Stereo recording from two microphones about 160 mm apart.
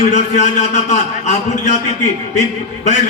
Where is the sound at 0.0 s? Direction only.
45° left (ahead or behind).